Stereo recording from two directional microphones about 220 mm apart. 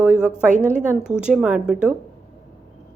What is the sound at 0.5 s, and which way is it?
Speech, 35° right (ahead or behind).